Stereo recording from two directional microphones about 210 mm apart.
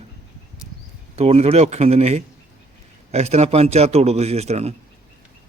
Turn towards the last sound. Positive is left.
turn(degrees=-30)  # may be behind; listen again after turning